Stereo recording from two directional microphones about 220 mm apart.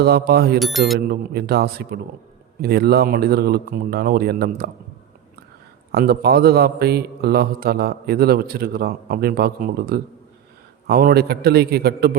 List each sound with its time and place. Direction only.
0.0 s a man's voice: 45° right (ahead or behind)
0.6 s speech: centre (ahead or behind)
0.9 s a man's voice: 45° right (ahead or behind)
5.9 s a man's voice: 45° right (ahead or behind)